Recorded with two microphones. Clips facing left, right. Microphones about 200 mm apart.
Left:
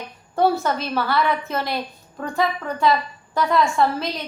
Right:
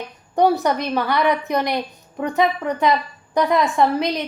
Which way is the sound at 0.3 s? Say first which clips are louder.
Right 3 dB; 15° right (ahead or behind).